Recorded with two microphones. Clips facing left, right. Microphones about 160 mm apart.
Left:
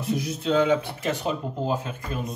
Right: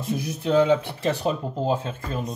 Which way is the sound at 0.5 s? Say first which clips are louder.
Right 2 dB; 30° right (ahead or behind).